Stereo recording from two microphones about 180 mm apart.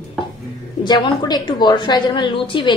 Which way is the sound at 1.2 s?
25° left (ahead or behind).